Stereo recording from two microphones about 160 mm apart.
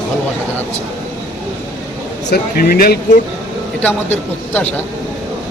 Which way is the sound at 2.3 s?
70° left (ahead or behind).